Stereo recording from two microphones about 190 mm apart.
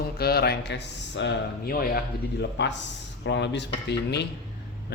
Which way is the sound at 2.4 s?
65° left (ahead or behind).